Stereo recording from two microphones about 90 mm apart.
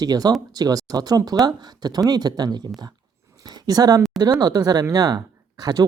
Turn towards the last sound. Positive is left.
turn(degrees=-45)  # may be behind; listen again after turning